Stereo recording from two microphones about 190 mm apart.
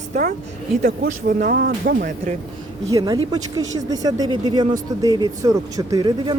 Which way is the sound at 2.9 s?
20° right (ahead or behind).